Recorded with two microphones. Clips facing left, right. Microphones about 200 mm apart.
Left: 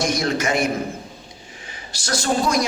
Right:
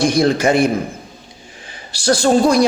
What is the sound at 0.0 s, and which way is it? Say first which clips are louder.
Speech: right 8 dB; 30° right (ahead or behind).